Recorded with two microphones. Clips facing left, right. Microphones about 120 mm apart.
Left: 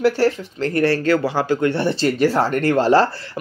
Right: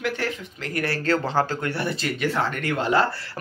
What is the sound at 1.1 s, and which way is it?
Speech, 10° left (ahead or behind).